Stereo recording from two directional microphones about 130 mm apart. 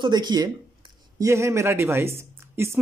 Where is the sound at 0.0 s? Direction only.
35° right (ahead or behind).